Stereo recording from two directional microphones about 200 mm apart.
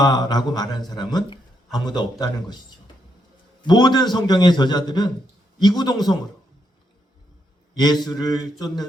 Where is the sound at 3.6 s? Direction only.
20° left (ahead or behind).